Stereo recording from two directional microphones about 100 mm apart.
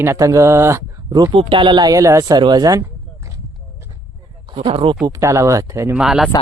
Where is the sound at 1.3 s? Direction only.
60° right (ahead or behind).